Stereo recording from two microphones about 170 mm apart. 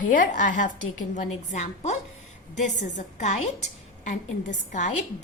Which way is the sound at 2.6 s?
45° left (ahead or behind).